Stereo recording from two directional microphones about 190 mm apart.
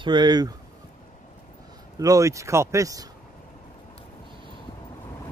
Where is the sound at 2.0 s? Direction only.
15° right (ahead or behind).